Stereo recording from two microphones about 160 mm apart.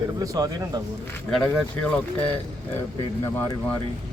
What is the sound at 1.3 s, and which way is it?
Speech, 5° left (ahead or behind).